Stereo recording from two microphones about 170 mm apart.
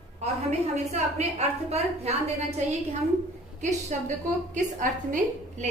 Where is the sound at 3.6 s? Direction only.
45° right (ahead or behind).